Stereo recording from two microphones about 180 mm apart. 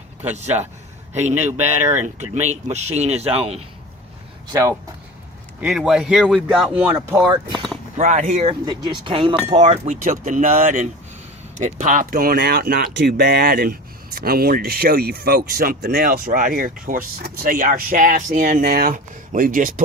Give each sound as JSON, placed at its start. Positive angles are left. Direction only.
{"t": 0.2, "sound": "speech", "side_deg": -40}
{"t": 4.4, "sound": "speech", "side_deg": -20}
{"t": 5.5, "sound": "speech", "side_deg": -5}
{"t": 6.9, "sound": "speech", "side_deg": -20}
{"t": 7.9, "sound": "speech", "side_deg": -45}
{"t": 8.6, "sound": "speech", "side_deg": -25}
{"t": 9.5, "sound": "speech", "side_deg": -40}